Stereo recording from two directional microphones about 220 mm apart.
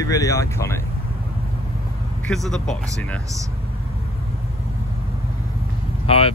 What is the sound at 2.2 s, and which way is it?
Speech, centre (ahead or behind).